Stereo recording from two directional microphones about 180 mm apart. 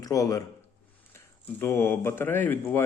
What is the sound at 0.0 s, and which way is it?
A man's voice, 20° left (ahead or behind).